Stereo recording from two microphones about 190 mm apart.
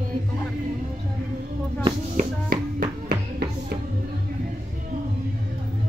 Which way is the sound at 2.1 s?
50° right (ahead or behind).